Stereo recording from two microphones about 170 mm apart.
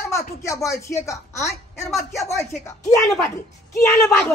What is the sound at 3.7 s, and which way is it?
Speech, 15° left (ahead or behind).